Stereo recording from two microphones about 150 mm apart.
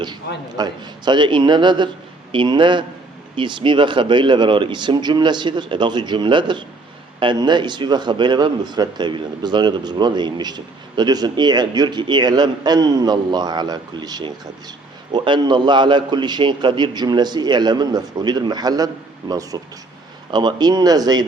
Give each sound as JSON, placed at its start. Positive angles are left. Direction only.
{"t": 0.5, "sound": "a man's voice", "side_deg": -30}